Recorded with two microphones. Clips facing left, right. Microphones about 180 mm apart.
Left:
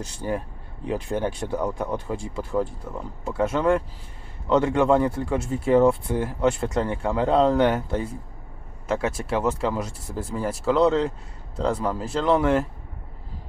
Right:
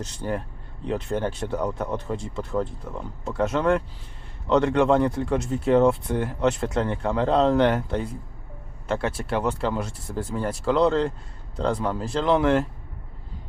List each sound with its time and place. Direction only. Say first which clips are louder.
0.0 s speech: left 1 dB; 10° left (ahead or behind)